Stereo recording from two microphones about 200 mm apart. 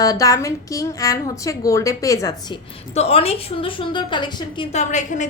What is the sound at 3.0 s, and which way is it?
A woman's voice, 30° left (ahead or behind).